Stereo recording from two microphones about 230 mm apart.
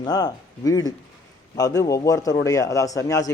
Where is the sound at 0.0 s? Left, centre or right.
Centre.